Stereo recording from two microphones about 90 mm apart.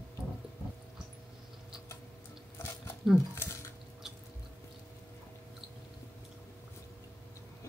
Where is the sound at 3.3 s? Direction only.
30° left (ahead or behind).